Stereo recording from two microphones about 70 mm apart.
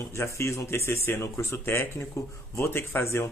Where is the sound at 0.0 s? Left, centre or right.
Left.